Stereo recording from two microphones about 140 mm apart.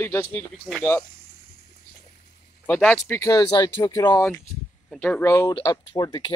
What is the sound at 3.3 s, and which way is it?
Speech, 30° left (ahead or behind).